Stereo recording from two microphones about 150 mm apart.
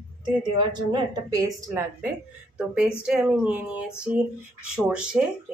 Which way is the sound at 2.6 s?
5° right (ahead or behind).